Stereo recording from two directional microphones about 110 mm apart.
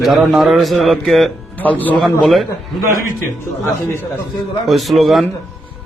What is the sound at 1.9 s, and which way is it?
Speech, centre (ahead or behind).